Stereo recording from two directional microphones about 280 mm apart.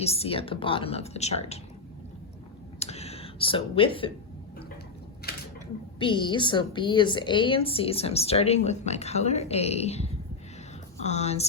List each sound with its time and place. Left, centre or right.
0.0 s a woman's voice: left
2.7 s speech: left
5.3 s a sound: left
6.0 s a woman's voice: centre